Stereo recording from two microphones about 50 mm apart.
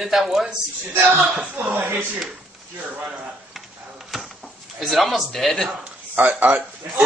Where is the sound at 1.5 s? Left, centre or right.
Right.